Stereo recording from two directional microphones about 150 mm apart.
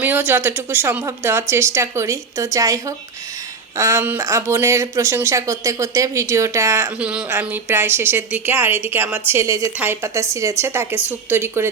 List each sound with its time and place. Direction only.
0.0 s speech: 10° right (ahead or behind)